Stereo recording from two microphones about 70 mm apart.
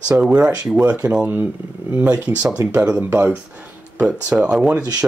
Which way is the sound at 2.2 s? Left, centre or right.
Right.